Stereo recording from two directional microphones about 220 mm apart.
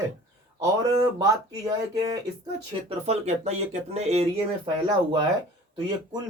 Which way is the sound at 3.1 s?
30° right (ahead or behind).